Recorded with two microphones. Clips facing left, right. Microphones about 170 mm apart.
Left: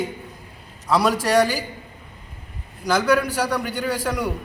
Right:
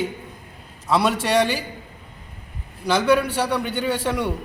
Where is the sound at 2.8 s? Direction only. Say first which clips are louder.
Right 1 dB; 30° right (ahead or behind).